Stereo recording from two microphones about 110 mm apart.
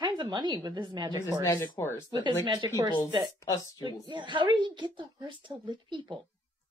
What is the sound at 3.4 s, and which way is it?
Speech, 30° left (ahead or behind).